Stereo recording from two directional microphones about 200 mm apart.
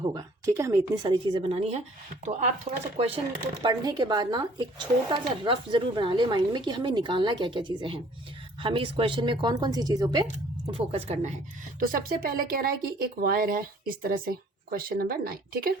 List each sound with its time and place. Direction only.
0.0 s speech: 20° right (ahead or behind); by 2.5 s 35° right (ahead or behind)
3.6 s speech: 20° right (ahead or behind)
10.2 s speech: 30° right (ahead or behind)
11.8 s speech: 45° right (ahead or behind)